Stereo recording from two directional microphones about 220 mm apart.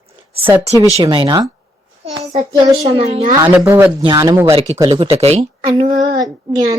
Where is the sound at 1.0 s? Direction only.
20° right (ahead or behind).